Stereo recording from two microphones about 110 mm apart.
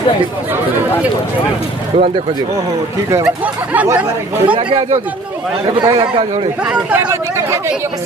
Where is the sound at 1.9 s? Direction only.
65° right (ahead or behind).